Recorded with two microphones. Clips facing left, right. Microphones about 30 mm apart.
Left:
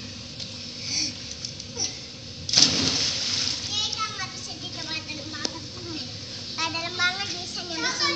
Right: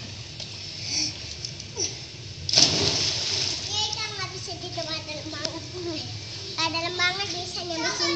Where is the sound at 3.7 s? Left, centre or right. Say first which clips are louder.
Left 1 dB; centre.